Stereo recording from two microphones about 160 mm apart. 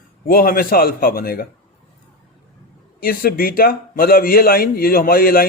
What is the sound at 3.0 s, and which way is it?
A man's voice, 65° left (ahead or behind).